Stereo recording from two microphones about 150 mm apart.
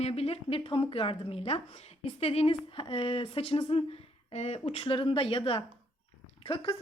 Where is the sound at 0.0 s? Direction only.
40° left (ahead or behind).